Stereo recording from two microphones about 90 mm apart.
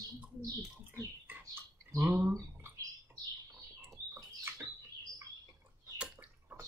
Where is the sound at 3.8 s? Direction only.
25° right (ahead or behind).